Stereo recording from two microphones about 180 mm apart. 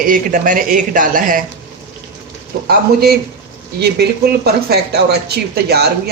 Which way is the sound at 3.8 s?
65° right (ahead or behind).